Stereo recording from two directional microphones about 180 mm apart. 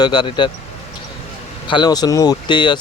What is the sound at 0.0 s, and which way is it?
Speech, 25° left (ahead or behind).